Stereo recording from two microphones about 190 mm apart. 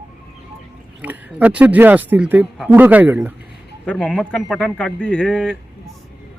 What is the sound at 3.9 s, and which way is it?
Speech, 5° left (ahead or behind).